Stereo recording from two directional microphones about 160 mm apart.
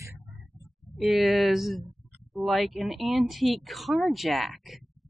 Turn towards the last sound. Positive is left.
turn(degrees=0)  # may be behind; listen again after turning